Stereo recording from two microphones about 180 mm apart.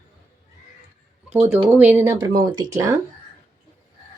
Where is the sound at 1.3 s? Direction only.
15° right (ahead or behind).